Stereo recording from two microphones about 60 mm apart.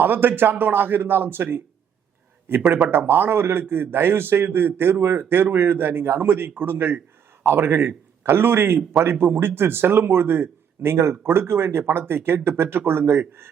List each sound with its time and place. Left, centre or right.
0.0 s a man's voice: right
2.6 s speech: centre
2.9 s a man's voice: right